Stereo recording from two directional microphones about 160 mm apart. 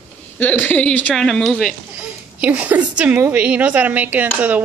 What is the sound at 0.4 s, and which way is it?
Speech, 10° left (ahead or behind).